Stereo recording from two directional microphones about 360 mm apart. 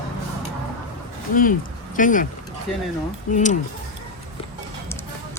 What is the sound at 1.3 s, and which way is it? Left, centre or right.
Speech, left.